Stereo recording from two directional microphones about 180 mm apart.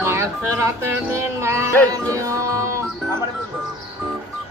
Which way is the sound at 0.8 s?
15° right (ahead or behind).